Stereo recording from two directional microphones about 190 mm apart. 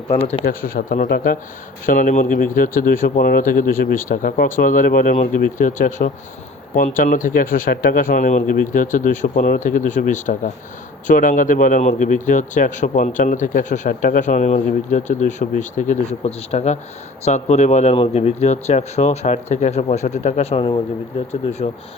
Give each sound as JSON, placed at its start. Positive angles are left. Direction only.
{"t": 0.1, "sound": "speech", "side_deg": 30}
{"t": 0.4, "sound": "speech", "side_deg": 50}